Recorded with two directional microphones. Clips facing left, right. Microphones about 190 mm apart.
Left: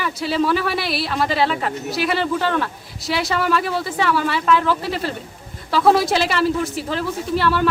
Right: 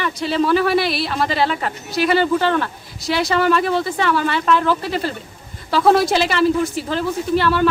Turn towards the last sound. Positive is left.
turn(degrees=0)  # may be behind; listen again after turning